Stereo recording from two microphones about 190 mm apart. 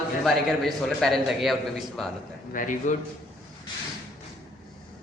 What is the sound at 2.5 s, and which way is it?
Speech, 45° left (ahead or behind).